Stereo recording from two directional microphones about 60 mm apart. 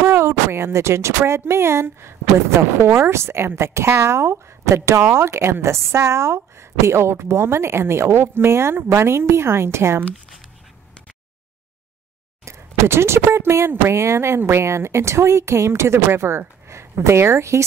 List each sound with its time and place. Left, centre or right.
0.0 s speech: right
12.4 s speech: right